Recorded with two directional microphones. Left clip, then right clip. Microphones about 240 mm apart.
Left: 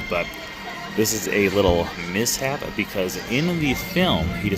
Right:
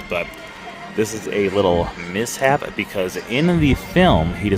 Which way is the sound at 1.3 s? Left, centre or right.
Centre.